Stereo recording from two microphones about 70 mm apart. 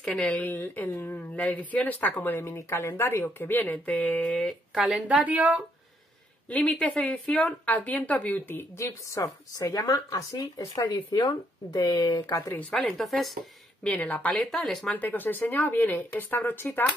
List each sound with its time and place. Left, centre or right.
0.0 s a woman's voice: centre
4.2 s speech: centre
4.7 s speech: centre
5.2 s speech: right
6.5 s a woman's voice: centre
8.7 s speech: left
11.1 s speech: left
11.8 s speech: left
12.7 s speech: centre
13.8 s a woman's voice: centre
14.4 s speech: centre
14.9 s a woman's voice: left